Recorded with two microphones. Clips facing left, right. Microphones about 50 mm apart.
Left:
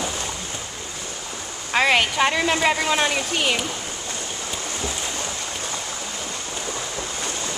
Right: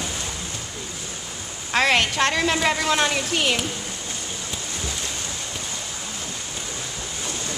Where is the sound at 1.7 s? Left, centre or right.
Centre.